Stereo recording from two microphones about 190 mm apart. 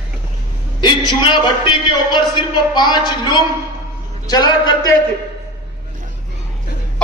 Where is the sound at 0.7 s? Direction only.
25° left (ahead or behind).